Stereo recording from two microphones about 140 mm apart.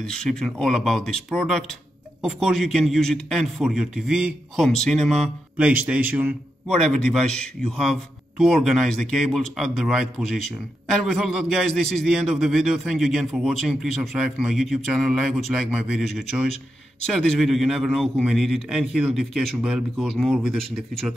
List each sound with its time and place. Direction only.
0.0 s a man's voice: 5° left (ahead or behind)
5.6 s speech: 10° right (ahead or behind)
6.7 s a man's voice: 5° left (ahead or behind)